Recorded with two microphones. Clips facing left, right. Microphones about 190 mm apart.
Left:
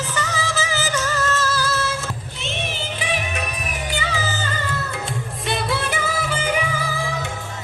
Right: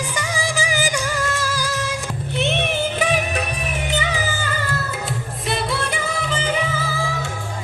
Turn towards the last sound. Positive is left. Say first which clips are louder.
# even
turn(degrees=10)  # may be behind; listen again after turning